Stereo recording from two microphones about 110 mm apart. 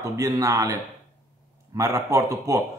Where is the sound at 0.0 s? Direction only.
30° right (ahead or behind).